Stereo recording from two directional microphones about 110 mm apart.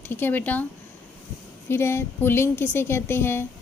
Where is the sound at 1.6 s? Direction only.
25° left (ahead or behind).